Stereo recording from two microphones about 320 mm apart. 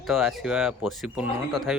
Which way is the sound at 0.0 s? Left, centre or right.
Centre.